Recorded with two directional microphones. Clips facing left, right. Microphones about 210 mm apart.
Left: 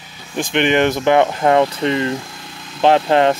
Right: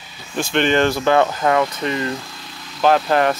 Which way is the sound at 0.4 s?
15° left (ahead or behind).